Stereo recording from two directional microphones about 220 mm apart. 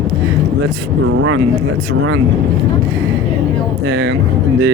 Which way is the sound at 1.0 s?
70° right (ahead or behind).